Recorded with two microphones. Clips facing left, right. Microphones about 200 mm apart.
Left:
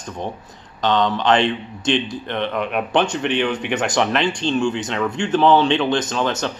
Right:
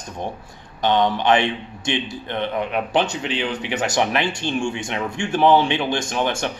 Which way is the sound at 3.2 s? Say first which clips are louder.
Left 4 dB; 60° left (ahead or behind).